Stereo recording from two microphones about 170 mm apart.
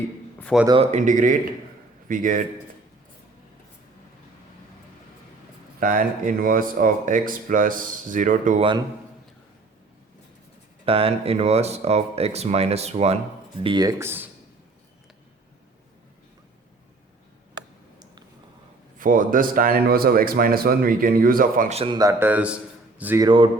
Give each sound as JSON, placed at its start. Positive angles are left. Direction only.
{"t": 0.7, "sound": "speech", "side_deg": -40}
{"t": 5.8, "sound": "speech", "side_deg": -50}
{"t": 10.8, "sound": "speech", "side_deg": -35}
{"t": 13.6, "sound": "speech", "side_deg": -25}
{"t": 18.9, "sound": "speech", "side_deg": -50}
{"t": 21.7, "sound": "speech", "side_deg": -35}
{"t": 21.9, "sound": "speech", "side_deg": -20}
{"t": 22.3, "sound": "a man's voice", "side_deg": -10}
{"t": 23.2, "sound": "speech", "side_deg": -30}